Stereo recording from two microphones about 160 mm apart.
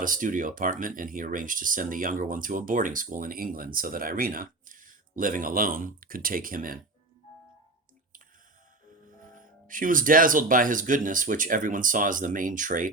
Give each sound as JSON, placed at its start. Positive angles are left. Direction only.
{"t": 0.0, "sound": "speech", "side_deg": -55}
{"t": 9.2, "sound": "speech", "side_deg": -55}